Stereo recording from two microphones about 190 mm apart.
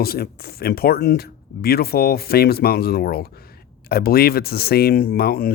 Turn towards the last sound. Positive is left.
turn(degrees=55)  # may be behind; listen again after turning